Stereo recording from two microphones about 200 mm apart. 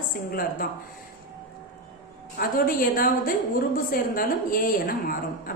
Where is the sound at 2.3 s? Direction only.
45° left (ahead or behind).